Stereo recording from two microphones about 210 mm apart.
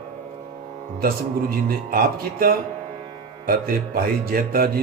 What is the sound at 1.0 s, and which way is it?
A man's voice, 45° right (ahead or behind).